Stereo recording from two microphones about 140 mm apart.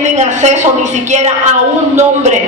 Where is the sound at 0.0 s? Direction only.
55° right (ahead or behind).